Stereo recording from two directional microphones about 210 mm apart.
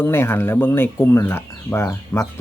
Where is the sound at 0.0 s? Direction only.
10° left (ahead or behind).